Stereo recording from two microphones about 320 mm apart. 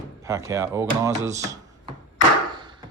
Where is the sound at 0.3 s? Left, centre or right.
Centre.